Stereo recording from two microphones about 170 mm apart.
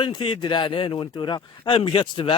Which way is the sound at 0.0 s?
25° left (ahead or behind).